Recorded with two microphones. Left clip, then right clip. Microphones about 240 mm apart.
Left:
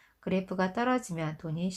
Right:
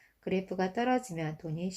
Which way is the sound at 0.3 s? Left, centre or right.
Left.